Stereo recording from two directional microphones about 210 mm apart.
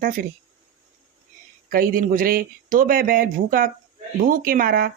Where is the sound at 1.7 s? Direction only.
45° right (ahead or behind).